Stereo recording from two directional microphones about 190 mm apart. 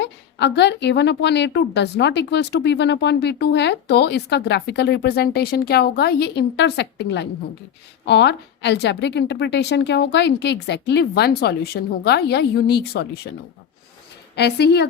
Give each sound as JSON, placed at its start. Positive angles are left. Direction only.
{"t": 0.0, "sound": "a woman's voice", "side_deg": 65}
{"t": 14.3, "sound": "a woman's voice", "side_deg": 60}